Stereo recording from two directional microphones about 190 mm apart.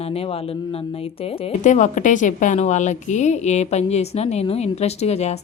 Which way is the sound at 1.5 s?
40° left (ahead or behind).